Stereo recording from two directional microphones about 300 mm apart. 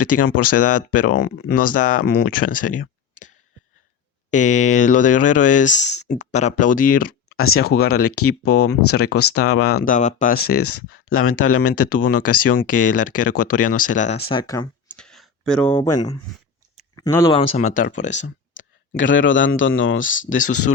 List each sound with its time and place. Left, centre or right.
0.0 s speech: left
4.3 s speech: left
7.3 s speech: left
8.9 s speech: left
10.7 s speech: left
12.5 s speech: left; by 16.0 s centre
17.0 s speech: centre
18.9 s speech: left
20.4 s speech: left